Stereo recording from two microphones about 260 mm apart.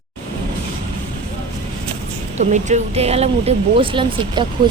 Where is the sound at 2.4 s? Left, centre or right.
Right.